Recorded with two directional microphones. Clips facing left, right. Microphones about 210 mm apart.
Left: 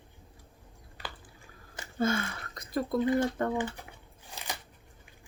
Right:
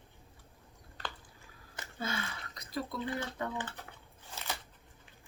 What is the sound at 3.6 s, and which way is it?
Scissors, 10° left (ahead or behind).